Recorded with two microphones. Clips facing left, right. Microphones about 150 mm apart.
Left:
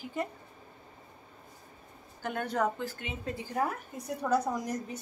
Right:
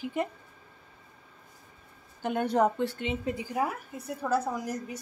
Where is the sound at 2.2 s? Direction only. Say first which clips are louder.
Right 5 dB; 20° right (ahead or behind).